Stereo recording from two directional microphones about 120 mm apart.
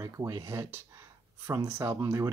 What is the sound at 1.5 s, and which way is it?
Speech, 20° right (ahead or behind).